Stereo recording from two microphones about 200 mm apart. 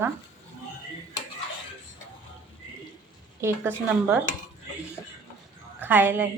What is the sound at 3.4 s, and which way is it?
Speech, 10° right (ahead or behind).